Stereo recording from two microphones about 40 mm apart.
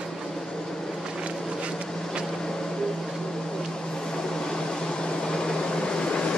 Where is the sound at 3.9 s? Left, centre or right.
Centre.